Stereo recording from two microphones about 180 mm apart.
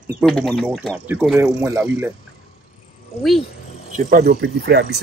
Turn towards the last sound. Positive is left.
turn(degrees=-65)  # may be behind; listen again after turning